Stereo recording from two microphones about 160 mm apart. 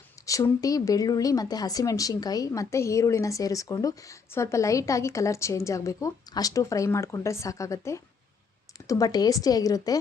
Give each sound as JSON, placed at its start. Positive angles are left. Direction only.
{"t": 0.3, "sound": "speech", "side_deg": 20}